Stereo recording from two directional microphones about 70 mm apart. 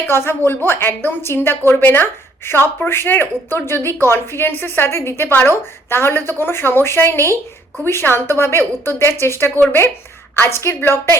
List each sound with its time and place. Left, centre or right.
0.1 s a woman's voice: left